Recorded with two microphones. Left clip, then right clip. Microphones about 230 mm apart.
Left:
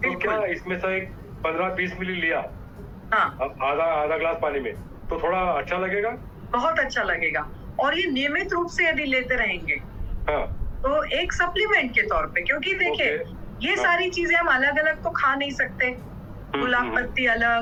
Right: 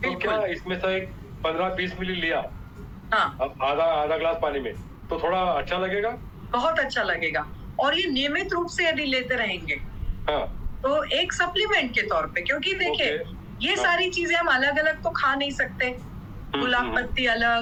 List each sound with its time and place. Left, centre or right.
0.0 s a woman's voice: centre